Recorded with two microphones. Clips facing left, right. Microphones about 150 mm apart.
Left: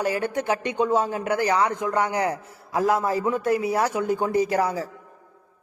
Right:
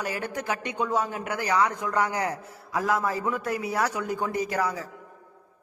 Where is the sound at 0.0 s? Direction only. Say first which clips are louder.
Left 6 dB; 30° left (ahead or behind).